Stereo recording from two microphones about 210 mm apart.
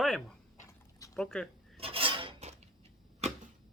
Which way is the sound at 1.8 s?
25° right (ahead or behind).